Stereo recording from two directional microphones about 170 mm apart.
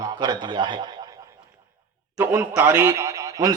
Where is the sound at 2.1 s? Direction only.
10° right (ahead or behind).